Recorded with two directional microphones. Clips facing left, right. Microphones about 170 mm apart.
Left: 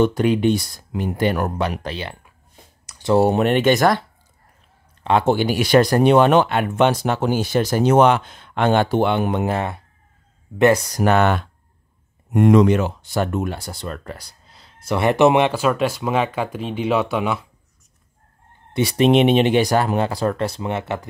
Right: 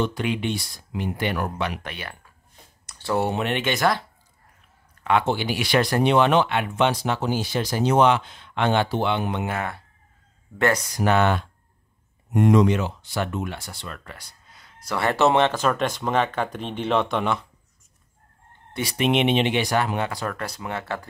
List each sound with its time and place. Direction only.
0.0 s speech: 45° left (ahead or behind)
3.2 s speech: 45° left (ahead or behind)
5.2 s speech: 45° left (ahead or behind)
10.9 s speech: 50° left (ahead or behind); by 17.5 s 5° left (ahead or behind)
18.7 s speech: 25° left (ahead or behind)